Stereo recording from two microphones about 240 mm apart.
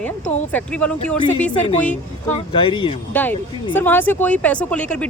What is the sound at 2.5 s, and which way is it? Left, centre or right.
Speech, centre.